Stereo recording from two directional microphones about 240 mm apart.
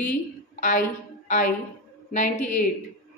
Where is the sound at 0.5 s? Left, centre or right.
Left.